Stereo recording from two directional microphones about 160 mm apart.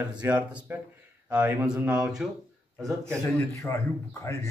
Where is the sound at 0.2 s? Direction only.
10° right (ahead or behind).